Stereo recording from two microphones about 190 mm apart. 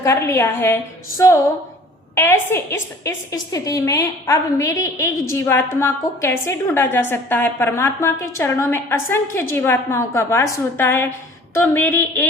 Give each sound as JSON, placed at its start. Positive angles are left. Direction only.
{"t": 0.0, "sound": "a woman's voice", "side_deg": 15}